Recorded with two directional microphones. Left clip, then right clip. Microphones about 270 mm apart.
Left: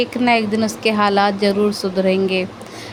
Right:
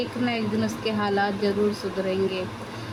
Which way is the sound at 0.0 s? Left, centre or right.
Left.